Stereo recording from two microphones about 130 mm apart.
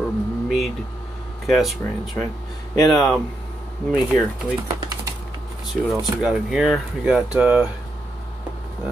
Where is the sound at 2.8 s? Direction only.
Centre (ahead or behind).